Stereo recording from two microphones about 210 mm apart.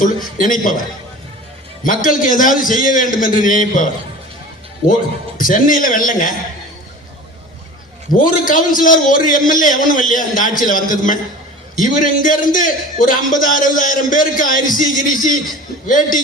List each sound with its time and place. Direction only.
0.0 s a man's voice: 40° left (ahead or behind)
1.8 s a man's voice: 40° left (ahead or behind)
5.4 s a man's voice: 40° left (ahead or behind)
8.1 s a man's voice: 40° left (ahead or behind)